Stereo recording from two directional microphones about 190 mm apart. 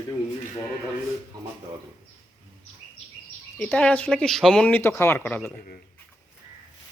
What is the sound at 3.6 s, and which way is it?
Speech, 5° left (ahead or behind).